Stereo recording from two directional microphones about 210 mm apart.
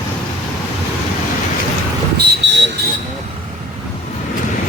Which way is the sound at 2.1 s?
55° right (ahead or behind).